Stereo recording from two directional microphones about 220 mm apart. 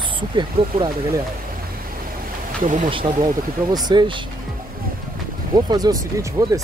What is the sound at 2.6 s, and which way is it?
Speech, 35° right (ahead or behind).